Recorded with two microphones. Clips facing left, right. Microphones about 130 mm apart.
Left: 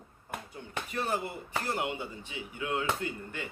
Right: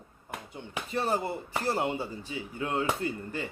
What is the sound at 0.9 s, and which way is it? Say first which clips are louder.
Speech: right 4 dB; 35° right (ahead or behind).